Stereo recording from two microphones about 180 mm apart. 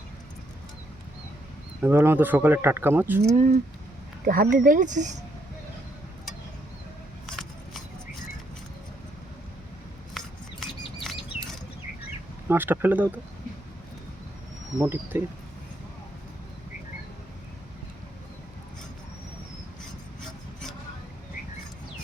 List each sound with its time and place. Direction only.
1.8 s speech: 10° right (ahead or behind)
3.2 s speech: 40° right (ahead or behind)
4.3 s speech: 50° right (ahead or behind)
7.3 s a sound: centre (ahead or behind)
10.2 s mouse: centre (ahead or behind)
12.5 s speech: 10° right (ahead or behind)
14.8 s speech: 10° right (ahead or behind)